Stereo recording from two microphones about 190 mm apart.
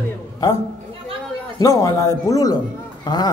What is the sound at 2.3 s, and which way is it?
A man's voice, 20° left (ahead or behind).